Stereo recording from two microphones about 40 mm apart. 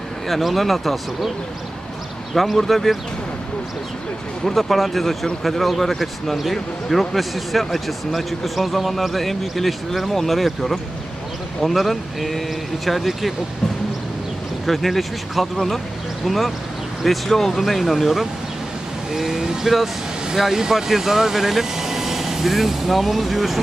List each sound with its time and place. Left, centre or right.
0.3 s speech: centre
2.3 s speech: centre
4.4 s speech: centre
14.7 s speech: centre
17.6 s speech: centre